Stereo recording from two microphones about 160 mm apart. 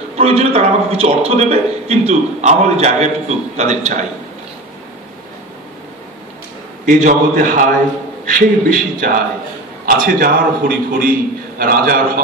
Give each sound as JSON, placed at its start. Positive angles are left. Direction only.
{"t": 0.2, "sound": "a man's voice", "side_deg": -40}
{"t": 6.9, "sound": "a man's voice", "side_deg": -50}